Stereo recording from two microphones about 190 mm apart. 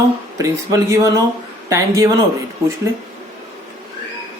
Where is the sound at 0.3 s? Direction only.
15° right (ahead or behind).